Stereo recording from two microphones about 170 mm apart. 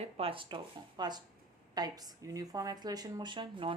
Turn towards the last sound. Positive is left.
turn(degrees=-30)  # may be behind; listen again after turning